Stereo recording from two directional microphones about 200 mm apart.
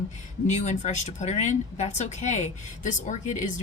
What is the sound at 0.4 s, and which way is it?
Speech, 35° left (ahead or behind).